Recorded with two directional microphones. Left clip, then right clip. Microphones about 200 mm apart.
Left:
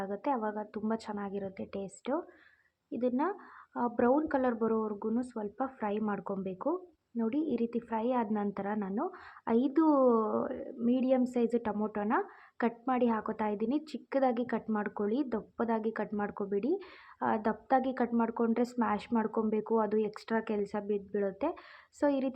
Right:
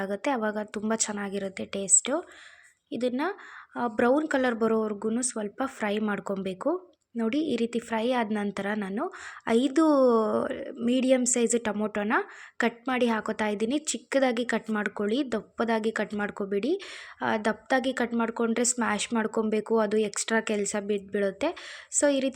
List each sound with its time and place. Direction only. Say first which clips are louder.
0.0 s speech: right 5 dB; 25° right (ahead or behind)